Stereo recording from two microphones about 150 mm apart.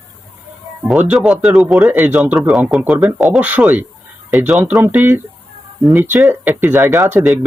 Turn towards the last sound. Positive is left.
turn(degrees=-15)  # may be behind; listen again after turning